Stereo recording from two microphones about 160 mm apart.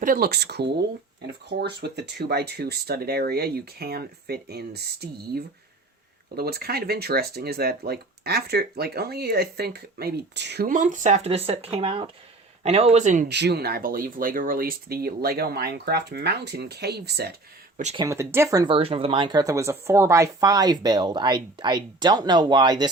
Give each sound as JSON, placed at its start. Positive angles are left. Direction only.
{"t": 0.0, "sound": "speech", "side_deg": -65}
{"t": 6.3, "sound": "speech", "side_deg": -75}
{"t": 13.2, "sound": "speech", "side_deg": -90}
{"t": 17.9, "sound": "speech", "side_deg": -20}